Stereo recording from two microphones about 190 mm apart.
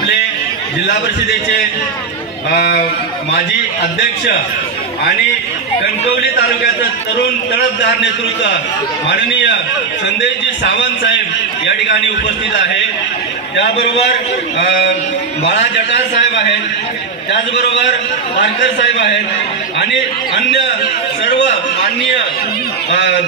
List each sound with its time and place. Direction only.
2.5 s a man's voice: 55° left (ahead or behind)
7.8 s a man's voice: 70° left (ahead or behind)
10.6 s a man's voice: 70° left (ahead or behind)
14.6 s a man's voice: 70° left (ahead or behind)